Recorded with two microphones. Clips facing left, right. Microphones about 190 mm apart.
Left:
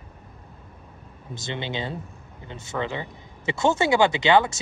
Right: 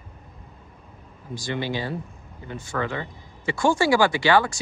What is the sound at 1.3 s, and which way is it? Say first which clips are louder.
Speech: right 3 dB; 20° left (ahead or behind).